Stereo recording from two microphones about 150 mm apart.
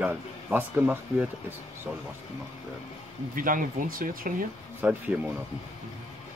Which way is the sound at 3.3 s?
65° right (ahead or behind).